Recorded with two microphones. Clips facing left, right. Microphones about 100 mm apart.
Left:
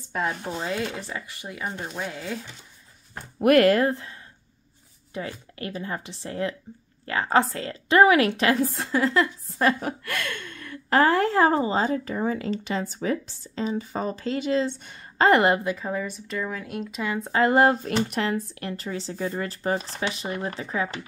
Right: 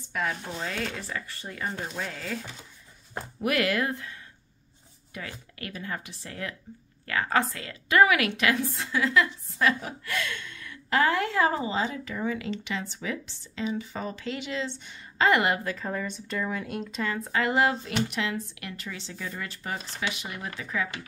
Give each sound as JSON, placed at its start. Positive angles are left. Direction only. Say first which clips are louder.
{"t": 0.1, "sound": "speech", "louder": "left 3 dB", "side_deg": 25}
{"t": 3.3, "sound": "a woman's voice", "louder": "left 9 dB", "side_deg": 50}
{"t": 9.8, "sound": "a woman's voice", "louder": "left 3 dB", "side_deg": 55}
{"t": 15.6, "sound": "speech", "louder": "left 4 dB", "side_deg": 15}
{"t": 17.2, "sound": "a woman's voice", "louder": "left 6 dB", "side_deg": 35}